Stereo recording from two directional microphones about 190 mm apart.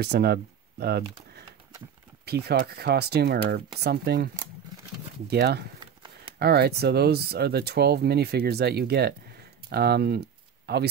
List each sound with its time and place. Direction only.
0.0 s speech: 60° right (ahead or behind)
2.2 s speech: 55° right (ahead or behind)
5.3 s speech: 60° right (ahead or behind)